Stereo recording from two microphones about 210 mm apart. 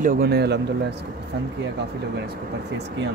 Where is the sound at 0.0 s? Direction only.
45° right (ahead or behind).